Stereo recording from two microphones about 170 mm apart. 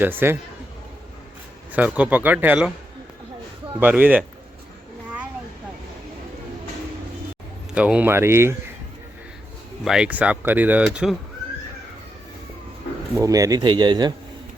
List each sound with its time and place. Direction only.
0.0 s speech: 10° right (ahead or behind)
1.7 s speech: 10° right (ahead or behind)
3.8 s speech: 10° right (ahead or behind)
7.8 s speech: 5° right (ahead or behind)
9.8 s speech: 5° right (ahead or behind)
13.1 s speech: 20° right (ahead or behind)